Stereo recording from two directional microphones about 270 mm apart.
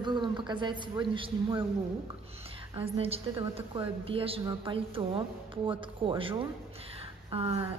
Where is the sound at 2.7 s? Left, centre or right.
Right.